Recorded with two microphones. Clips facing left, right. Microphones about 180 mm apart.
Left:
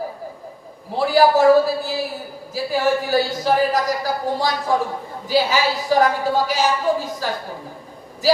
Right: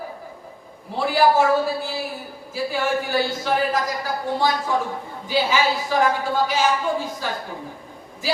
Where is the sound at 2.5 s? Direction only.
40° left (ahead or behind).